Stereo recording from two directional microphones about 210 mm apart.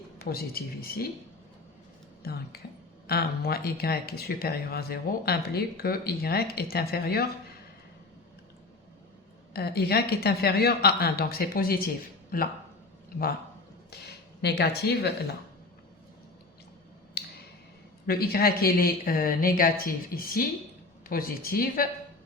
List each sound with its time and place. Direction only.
0.3 s speech: 45° left (ahead or behind)
2.2 s speech: 50° left (ahead or behind)
9.5 s speech: 50° left (ahead or behind)
14.4 s speech: 50° left (ahead or behind)
17.2 s a sound: 50° left (ahead or behind)
18.0 s speech: 45° left (ahead or behind)